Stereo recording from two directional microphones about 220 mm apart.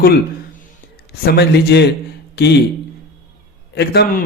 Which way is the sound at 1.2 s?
45° left (ahead or behind).